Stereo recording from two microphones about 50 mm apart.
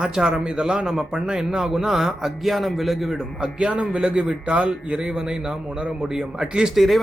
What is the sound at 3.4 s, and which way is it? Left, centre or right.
A man's voice, right.